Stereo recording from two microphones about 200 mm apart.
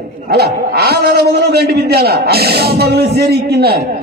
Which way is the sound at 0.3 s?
50° right (ahead or behind).